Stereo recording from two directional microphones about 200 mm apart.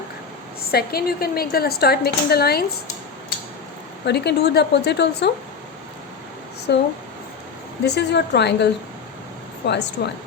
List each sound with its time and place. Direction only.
0.7 s speech: 50° left (ahead or behind)
4.0 s a woman's voice: 55° left (ahead or behind)
6.7 s a woman's voice: 55° left (ahead or behind)
7.9 s a woman's voice: 55° left (ahead or behind)
9.6 s a woman's voice: 55° left (ahead or behind)